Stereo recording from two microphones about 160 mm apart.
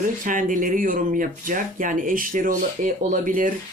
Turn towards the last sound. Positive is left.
turn(degrees=-55)  # may be behind; listen again after turning